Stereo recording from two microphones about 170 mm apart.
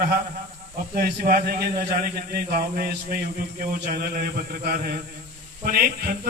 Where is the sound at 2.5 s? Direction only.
60° right (ahead or behind).